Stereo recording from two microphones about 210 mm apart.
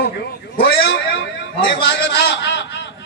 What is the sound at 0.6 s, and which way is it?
A man's voice, 50° left (ahead or behind).